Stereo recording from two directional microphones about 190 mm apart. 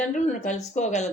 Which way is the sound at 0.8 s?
35° left (ahead or behind).